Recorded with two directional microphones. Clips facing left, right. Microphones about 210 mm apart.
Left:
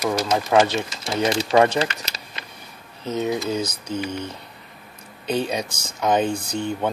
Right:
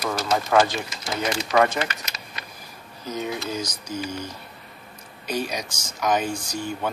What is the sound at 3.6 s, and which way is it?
Lullaby, 60° left (ahead or behind).